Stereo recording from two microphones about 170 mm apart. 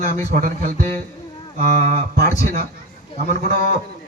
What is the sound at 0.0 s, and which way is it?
A man's voice, 60° right (ahead or behind).